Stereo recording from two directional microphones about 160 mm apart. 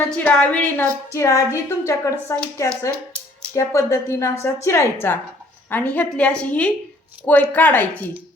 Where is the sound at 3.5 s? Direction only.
20° left (ahead or behind).